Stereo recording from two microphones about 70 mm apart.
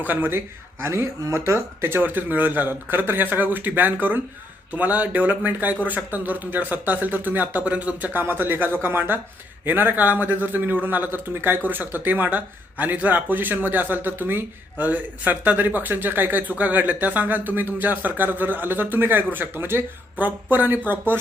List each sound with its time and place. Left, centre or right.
0.0 s speech: right